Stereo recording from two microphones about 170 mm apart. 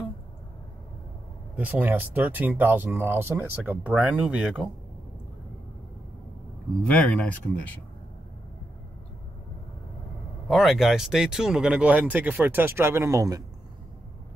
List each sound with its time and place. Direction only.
1.6 s speech: 10° right (ahead or behind)
6.9 s speech: 10° left (ahead or behind)
10.5 s speech: centre (ahead or behind); by 13.4 s 20° right (ahead or behind)